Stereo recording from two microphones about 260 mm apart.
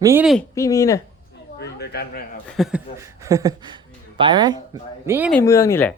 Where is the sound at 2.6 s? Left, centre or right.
Centre.